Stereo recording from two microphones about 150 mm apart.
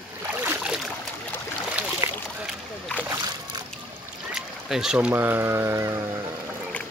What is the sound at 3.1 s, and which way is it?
Splash, 25° right (ahead or behind).